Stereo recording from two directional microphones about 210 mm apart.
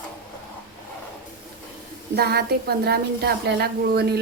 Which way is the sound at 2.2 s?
50° right (ahead or behind).